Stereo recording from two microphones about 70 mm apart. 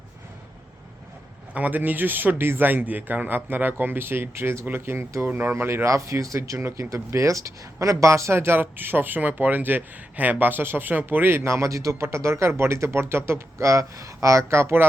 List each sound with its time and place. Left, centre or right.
1.5 s a man's voice: right